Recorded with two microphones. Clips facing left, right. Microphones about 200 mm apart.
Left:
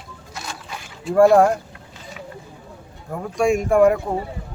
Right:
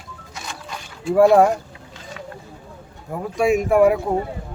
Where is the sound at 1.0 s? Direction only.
Centre (ahead or behind).